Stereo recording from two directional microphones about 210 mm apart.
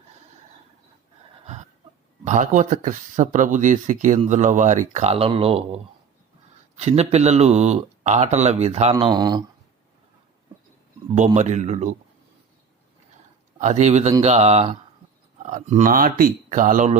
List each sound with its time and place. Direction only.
2.2 s speech: 35° right (ahead or behind); by 9.4 s 20° right (ahead or behind)
11.3 s speech: 35° right (ahead or behind)
13.6 s speech: 35° right (ahead or behind)